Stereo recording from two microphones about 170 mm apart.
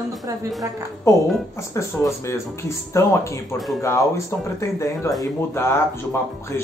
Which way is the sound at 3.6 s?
Centre (ahead or behind).